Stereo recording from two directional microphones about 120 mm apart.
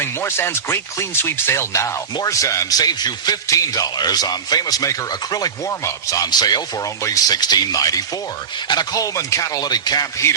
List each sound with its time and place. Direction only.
0.0 s a man's voice: 20° left (ahead or behind)